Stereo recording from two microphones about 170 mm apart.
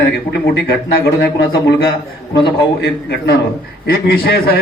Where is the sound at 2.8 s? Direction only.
65° left (ahead or behind).